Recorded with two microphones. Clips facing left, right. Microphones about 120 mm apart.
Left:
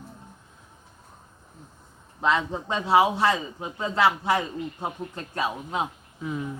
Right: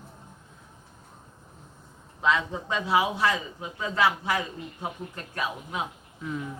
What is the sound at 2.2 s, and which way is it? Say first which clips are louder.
A man's voice: left 1 dB; 30° left (ahead or behind).